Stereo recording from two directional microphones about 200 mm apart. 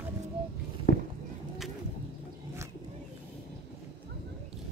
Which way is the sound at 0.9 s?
55° left (ahead or behind).